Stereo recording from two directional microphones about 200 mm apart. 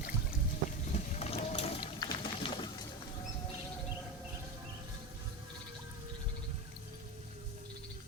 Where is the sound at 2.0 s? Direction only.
20° left (ahead or behind).